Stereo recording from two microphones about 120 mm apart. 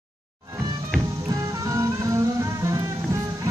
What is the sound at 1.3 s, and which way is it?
Music, 30° right (ahead or behind).